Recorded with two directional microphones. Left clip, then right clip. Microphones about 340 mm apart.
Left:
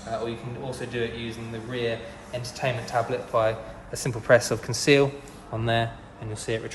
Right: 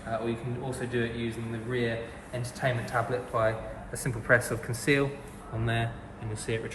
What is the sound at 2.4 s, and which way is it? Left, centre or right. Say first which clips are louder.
Speech: left 2 dB; centre.